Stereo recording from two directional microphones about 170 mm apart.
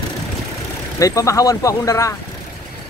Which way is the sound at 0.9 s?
20° left (ahead or behind).